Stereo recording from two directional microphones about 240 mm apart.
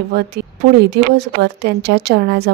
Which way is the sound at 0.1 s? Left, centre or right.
Right.